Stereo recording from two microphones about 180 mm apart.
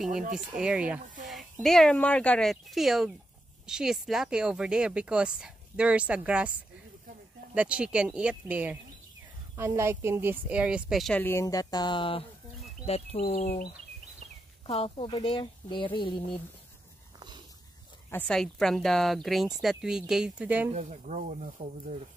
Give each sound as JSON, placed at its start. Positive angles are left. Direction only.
{"t": 0.1, "sound": "speech", "side_deg": -50}
{"t": 0.6, "sound": "speech", "side_deg": -5}
{"t": 7.5, "sound": "speech", "side_deg": -5}
{"t": 14.7, "sound": "speech", "side_deg": 30}
{"t": 18.1, "sound": "speech", "side_deg": 5}
{"t": 20.7, "sound": "speech", "side_deg": -40}